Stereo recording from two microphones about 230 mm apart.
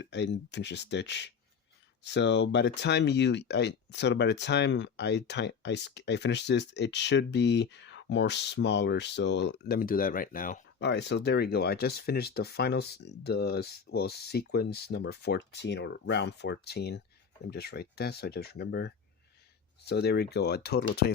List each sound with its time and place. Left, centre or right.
0.0 s speech: left